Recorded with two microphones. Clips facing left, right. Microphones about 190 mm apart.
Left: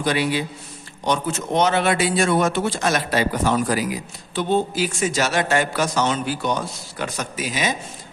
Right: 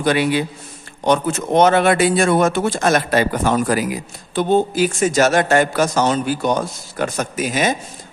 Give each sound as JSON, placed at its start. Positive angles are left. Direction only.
{"t": 0.0, "sound": "a man's voice", "side_deg": -55}